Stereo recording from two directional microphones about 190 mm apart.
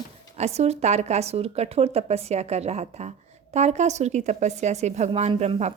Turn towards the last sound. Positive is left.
turn(degrees=-35)  # may be behind; listen again after turning